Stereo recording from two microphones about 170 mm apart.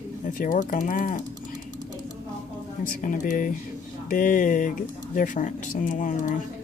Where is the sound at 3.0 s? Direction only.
50° left (ahead or behind).